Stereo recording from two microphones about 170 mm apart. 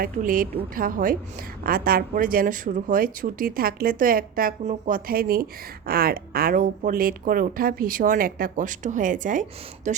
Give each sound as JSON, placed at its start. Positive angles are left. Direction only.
{"t": 0.0, "sound": "speech", "side_deg": -55}